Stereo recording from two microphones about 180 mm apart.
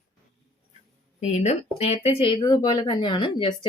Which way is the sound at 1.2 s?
40° left (ahead or behind).